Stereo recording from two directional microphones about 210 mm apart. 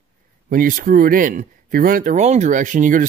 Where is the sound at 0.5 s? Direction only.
40° right (ahead or behind).